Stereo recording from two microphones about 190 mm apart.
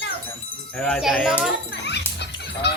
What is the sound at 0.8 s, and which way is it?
Speech, 5° left (ahead or behind).